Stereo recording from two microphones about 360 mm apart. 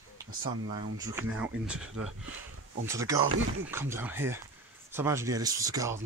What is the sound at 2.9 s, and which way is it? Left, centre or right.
Speech, centre.